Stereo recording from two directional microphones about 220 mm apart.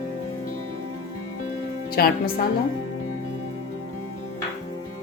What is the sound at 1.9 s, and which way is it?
Speech, 45° left (ahead or behind).